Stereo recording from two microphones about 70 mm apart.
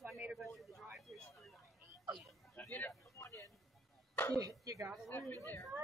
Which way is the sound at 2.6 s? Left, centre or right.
Left.